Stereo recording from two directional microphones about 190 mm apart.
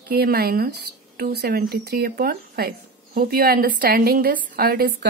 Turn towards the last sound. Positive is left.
turn(degrees=-55)  # may be behind; listen again after turning